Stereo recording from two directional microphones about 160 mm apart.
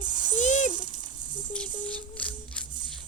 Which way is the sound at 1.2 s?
25° right (ahead or behind).